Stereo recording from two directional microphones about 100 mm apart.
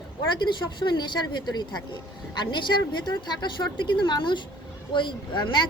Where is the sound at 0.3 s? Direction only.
50° left (ahead or behind).